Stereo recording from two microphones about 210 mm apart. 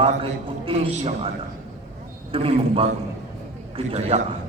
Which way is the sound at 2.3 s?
25° right (ahead or behind).